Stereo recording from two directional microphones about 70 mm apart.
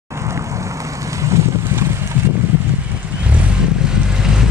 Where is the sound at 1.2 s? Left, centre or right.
Right.